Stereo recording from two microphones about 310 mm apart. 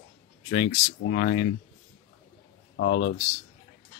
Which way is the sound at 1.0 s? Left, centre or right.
Left.